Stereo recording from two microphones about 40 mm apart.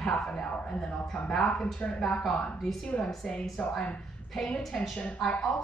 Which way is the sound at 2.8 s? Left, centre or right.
Left.